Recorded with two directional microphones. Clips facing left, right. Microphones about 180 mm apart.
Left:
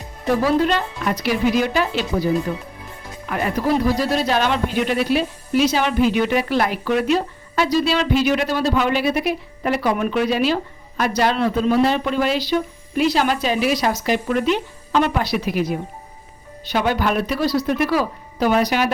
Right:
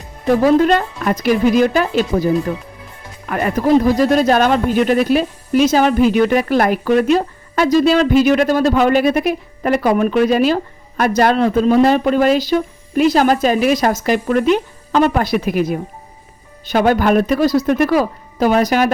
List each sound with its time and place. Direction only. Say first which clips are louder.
0.4 s speech: right 7 dB; 45° right (ahead or behind)